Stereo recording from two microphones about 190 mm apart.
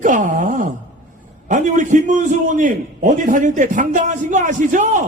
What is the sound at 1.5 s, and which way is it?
A man's voice, 40° right (ahead or behind).